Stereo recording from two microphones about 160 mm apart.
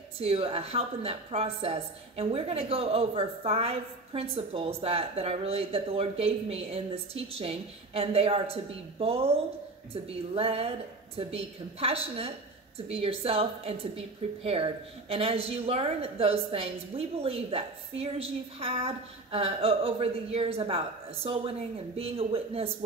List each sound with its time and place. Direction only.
0.2 s a woman's voice: 40° right (ahead or behind)